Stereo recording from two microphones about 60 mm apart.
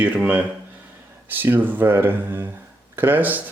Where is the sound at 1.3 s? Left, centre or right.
Right.